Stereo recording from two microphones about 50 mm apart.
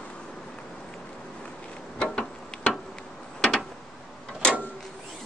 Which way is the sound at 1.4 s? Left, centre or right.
Centre.